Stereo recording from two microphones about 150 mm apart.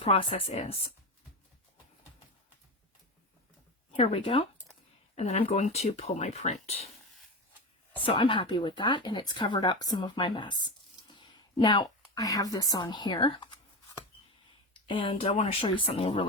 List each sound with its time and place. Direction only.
0.0 s speech: 40° left (ahead or behind)
3.9 s speech: 40° left (ahead or behind)
7.9 s speech: 35° left (ahead or behind)
11.1 s a sound: 30° left (ahead or behind)
14.8 s speech: 35° left (ahead or behind)
15.1 s speech: 50° left (ahead or behind)